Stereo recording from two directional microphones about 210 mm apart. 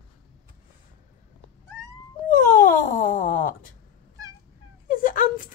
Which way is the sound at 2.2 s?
40° left (ahead or behind).